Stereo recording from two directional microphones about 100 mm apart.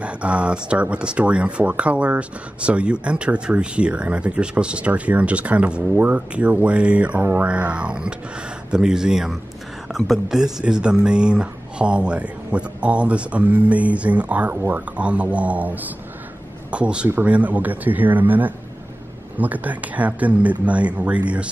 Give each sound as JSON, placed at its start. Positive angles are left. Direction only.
{"t": 0.0, "sound": "speech", "side_deg": -10}